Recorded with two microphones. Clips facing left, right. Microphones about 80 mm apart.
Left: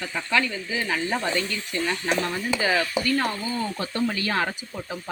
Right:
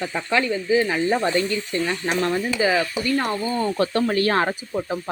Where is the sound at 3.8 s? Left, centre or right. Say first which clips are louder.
Right 6 dB; right.